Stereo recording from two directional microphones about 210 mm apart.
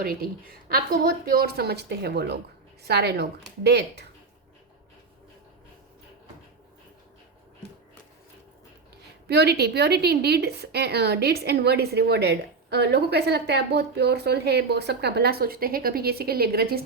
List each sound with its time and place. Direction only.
0.0 s a woman's voice: 45° right (ahead or behind)
9.2 s a woman's voice: 50° right (ahead or behind)